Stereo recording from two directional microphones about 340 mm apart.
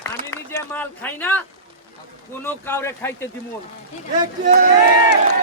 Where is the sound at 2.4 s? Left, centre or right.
Centre.